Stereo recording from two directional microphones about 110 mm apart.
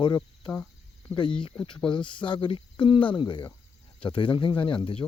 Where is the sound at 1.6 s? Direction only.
45° left (ahead or behind).